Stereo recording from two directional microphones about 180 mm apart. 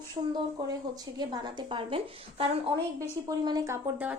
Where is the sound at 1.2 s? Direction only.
25° right (ahead or behind).